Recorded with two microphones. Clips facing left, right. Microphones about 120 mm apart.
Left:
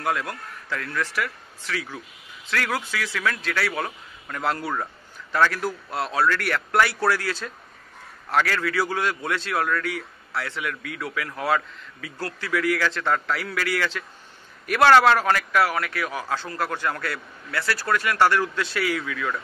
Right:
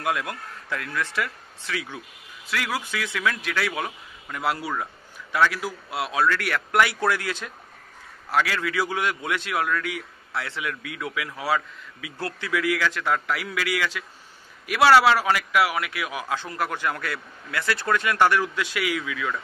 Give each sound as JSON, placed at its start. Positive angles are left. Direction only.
{"t": 0.0, "sound": "speech", "side_deg": -15}
{"t": 2.4, "sound": "a man's voice", "side_deg": -10}
{"t": 2.9, "sound": "a man's voice", "side_deg": -20}
{"t": 11.4, "sound": "speech", "side_deg": -5}
{"t": 12.2, "sound": "a man's voice", "side_deg": -20}